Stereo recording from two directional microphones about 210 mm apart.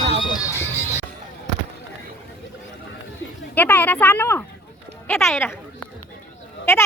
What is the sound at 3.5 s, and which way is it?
Speech, 10° left (ahead or behind).